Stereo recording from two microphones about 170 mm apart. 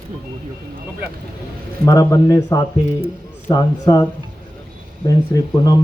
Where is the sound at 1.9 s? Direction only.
20° left (ahead or behind).